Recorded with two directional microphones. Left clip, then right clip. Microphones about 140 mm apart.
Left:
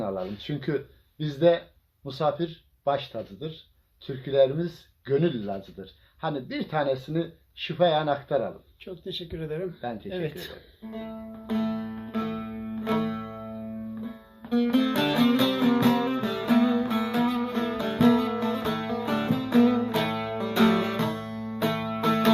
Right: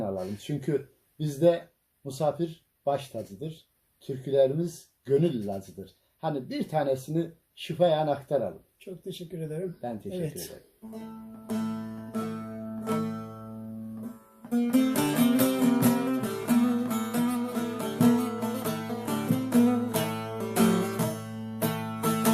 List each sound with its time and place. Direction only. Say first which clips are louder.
0.0 s speech: left 2 dB; 20° right (ahead or behind)
4.0 s speech: left 2 dB; 25° right (ahead or behind)
8.8 s speech: left 5 dB; centre (ahead or behind)
10.9 s music: left 6 dB; 20° left (ahead or behind)
14.5 s music: left 2 dB; 20° left (ahead or behind)